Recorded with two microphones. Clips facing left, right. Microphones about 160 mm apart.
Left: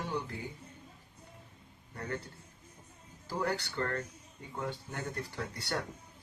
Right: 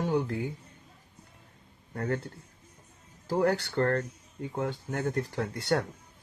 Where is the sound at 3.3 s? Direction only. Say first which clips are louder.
Right 8 dB; 45° right (ahead or behind).